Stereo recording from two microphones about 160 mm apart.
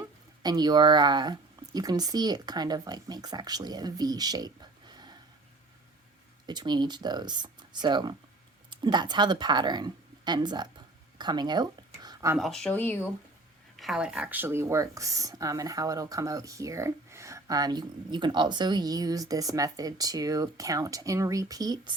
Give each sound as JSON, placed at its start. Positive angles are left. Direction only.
{"t": 0.4, "sound": "speech", "side_deg": -25}
{"t": 6.4, "sound": "a woman's voice", "side_deg": -25}
{"t": 12.4, "sound": "speech", "side_deg": 5}
{"t": 13.7, "sound": "speech", "side_deg": 0}